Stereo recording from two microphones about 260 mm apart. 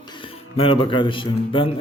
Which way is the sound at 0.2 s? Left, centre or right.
Left.